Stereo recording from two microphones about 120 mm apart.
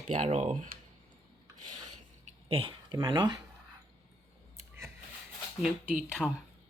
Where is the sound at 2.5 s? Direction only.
50° right (ahead or behind).